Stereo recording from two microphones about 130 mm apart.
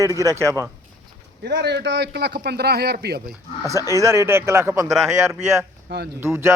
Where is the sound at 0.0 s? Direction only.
25° right (ahead or behind).